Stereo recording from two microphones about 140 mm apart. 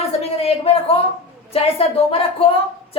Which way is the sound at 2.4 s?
45° left (ahead or behind).